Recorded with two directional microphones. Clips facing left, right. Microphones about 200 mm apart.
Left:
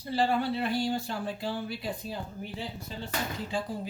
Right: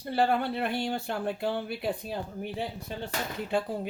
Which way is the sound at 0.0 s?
55° right (ahead or behind).